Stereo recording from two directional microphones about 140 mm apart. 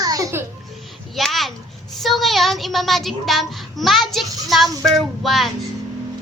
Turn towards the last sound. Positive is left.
turn(degrees=0)  # may be behind; listen again after turning